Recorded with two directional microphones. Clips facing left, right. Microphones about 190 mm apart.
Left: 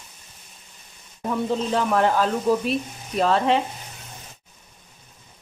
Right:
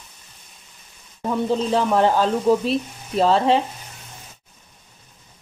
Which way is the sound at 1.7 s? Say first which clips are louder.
Right 2 dB; 30° right (ahead or behind).